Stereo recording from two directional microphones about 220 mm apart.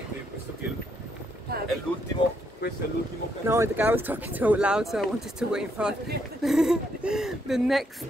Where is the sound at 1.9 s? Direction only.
5° left (ahead or behind).